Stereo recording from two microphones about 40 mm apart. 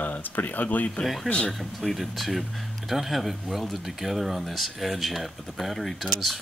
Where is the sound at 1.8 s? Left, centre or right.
Centre.